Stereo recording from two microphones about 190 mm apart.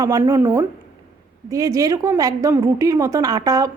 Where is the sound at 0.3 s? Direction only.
15° right (ahead or behind).